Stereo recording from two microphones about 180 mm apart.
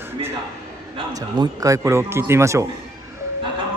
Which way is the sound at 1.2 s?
20° right (ahead or behind).